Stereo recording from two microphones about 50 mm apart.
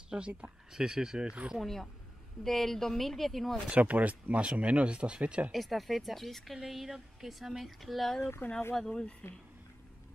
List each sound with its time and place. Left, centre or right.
0.1 s speech: right
0.7 s speech: centre
1.6 s speech: centre
3.7 s speech: right
5.5 s speech: centre
8.4 s speech: left
8.7 s speech: centre
9.2 s speech: left